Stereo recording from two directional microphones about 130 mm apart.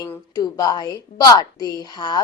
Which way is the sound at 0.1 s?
25° left (ahead or behind).